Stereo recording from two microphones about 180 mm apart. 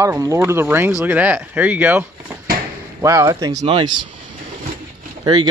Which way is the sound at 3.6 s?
30° right (ahead or behind).